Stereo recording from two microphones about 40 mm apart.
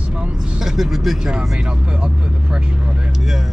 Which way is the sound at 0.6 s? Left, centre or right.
Centre.